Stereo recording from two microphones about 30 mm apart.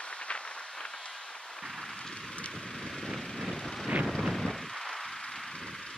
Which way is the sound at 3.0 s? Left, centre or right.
Centre.